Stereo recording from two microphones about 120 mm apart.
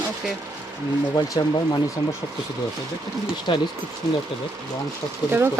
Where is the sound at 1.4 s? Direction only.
40° left (ahead or behind).